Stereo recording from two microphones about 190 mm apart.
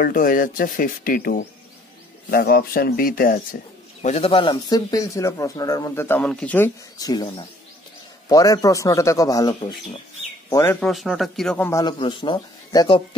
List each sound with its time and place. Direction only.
0.0 s speech: 45° left (ahead or behind)
4.0 s speech: 35° left (ahead or behind)
10.5 s speech: 10° left (ahead or behind)
11.8 s speech: 25° left (ahead or behind)